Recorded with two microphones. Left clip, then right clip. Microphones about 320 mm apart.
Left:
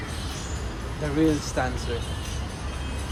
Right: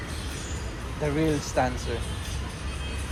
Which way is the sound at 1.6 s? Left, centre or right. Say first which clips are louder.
Right 2 dB; right.